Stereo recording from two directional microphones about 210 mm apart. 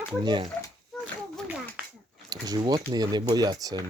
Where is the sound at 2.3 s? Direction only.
20° right (ahead or behind).